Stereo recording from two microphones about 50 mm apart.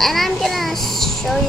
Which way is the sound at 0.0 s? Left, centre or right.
Centre.